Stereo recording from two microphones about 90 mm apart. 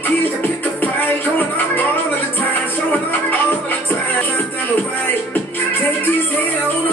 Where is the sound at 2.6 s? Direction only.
20° left (ahead or behind).